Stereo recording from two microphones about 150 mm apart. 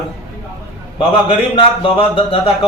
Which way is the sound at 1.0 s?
35° left (ahead or behind).